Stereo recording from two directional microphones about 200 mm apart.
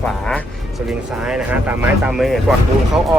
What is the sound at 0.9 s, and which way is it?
Speech, 5° right (ahead or behind).